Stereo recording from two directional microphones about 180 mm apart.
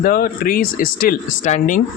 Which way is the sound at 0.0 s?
55° left (ahead or behind).